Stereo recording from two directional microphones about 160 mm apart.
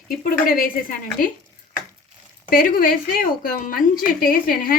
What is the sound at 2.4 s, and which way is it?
A woman's voice, 65° left (ahead or behind).